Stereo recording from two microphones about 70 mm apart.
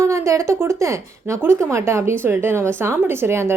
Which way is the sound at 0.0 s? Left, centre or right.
Right.